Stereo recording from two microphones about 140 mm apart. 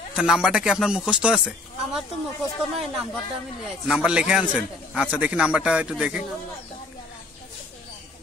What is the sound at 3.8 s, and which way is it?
A man's voice, 5° right (ahead or behind).